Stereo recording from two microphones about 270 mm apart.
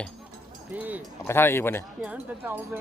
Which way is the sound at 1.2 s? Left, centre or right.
Centre.